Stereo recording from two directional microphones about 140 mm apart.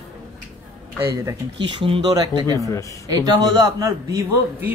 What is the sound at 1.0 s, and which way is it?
Speech, 20° right (ahead or behind).